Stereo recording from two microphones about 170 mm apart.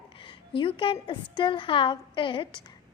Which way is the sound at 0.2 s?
30° left (ahead or behind).